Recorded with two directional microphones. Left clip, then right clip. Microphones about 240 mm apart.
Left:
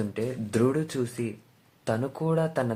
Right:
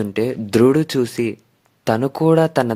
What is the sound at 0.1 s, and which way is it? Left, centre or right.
Speech, right.